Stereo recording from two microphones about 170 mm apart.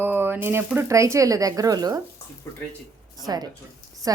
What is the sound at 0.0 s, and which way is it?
A woman's voice, 10° right (ahead or behind).